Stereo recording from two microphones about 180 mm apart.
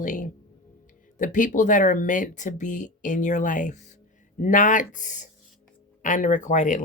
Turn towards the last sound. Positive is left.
turn(degrees=45)  # may be behind; listen again after turning